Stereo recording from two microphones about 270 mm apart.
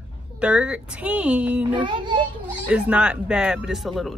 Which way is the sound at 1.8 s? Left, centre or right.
Centre.